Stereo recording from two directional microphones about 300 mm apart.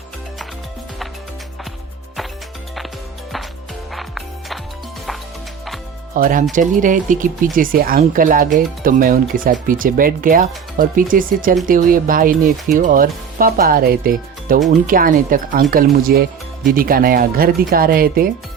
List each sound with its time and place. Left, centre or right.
3.9 s music: centre
6.1 s speech: right